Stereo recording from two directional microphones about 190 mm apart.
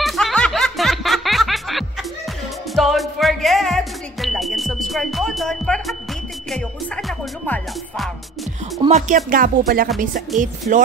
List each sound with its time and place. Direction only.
0.0 s music: centre (ahead or behind)
8.8 s music: 40° right (ahead or behind)